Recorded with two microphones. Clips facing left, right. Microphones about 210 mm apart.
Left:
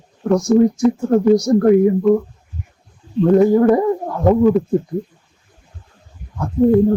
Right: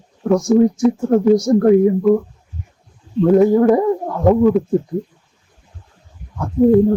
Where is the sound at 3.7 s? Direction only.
Centre (ahead or behind).